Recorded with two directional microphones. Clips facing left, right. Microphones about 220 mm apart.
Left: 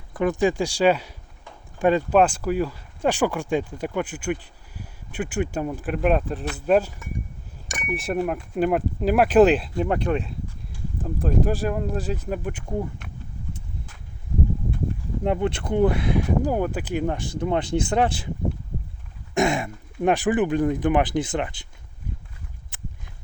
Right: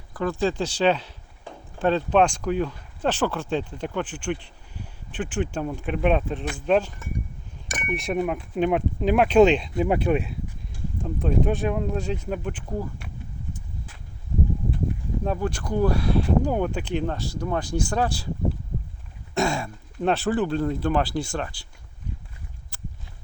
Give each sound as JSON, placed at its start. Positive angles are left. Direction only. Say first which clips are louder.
{"t": 0.1, "sound": "speech", "louder": "left 3 dB", "side_deg": 20}
{"t": 15.2, "sound": "speech", "louder": "left 4 dB", "side_deg": 20}
{"t": 16.4, "sound": "speech", "louder": "left 1 dB", "side_deg": 5}
{"t": 17.4, "sound": "speech", "louder": "left 4 dB", "side_deg": 20}
{"t": 19.3, "sound": "speech", "louder": "left 3 dB", "side_deg": 20}
{"t": 22.7, "sound": "a sound", "louder": "left 1 dB", "side_deg": 20}